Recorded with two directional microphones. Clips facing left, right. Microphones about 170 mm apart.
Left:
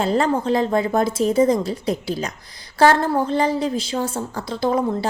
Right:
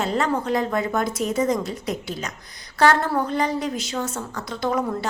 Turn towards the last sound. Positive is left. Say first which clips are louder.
# left 4 dB
turn(degrees=30)  # may be behind; listen again after turning